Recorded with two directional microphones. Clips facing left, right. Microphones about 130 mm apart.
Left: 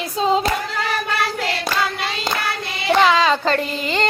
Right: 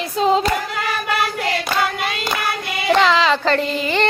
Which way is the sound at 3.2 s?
15° left (ahead or behind).